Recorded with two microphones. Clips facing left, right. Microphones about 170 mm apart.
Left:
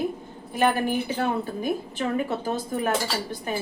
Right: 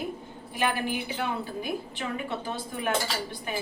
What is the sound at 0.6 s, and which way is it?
A woman's voice, 40° left (ahead or behind).